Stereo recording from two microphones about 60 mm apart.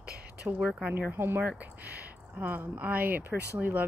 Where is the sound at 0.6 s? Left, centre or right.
Centre.